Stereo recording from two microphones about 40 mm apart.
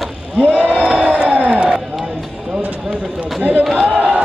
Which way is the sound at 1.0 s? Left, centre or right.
Right.